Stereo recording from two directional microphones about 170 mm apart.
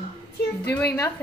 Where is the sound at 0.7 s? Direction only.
15° left (ahead or behind).